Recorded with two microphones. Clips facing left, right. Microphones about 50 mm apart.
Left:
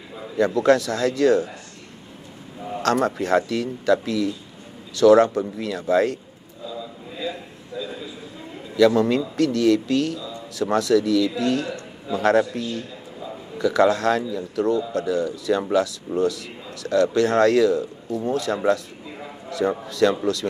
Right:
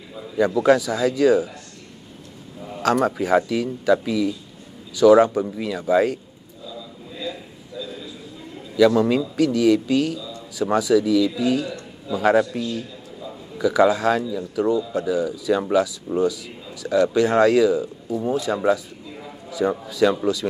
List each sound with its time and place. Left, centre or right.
0.6 s speech: centre
2.8 s speech: centre
6.7 s a sound: centre
8.7 s speech: centre